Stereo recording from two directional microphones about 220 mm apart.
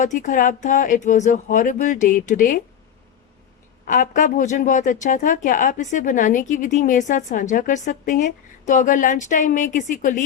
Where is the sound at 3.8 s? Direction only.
35° left (ahead or behind).